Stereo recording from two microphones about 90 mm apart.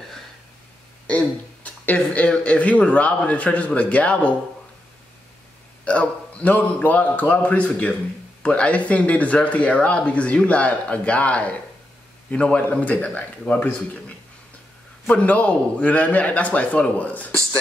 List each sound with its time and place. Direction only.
1.0 s speech: 15° left (ahead or behind)
5.9 s speech: 15° left (ahead or behind)